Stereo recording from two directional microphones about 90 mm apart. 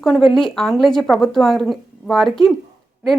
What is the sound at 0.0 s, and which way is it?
Speech, centre (ahead or behind).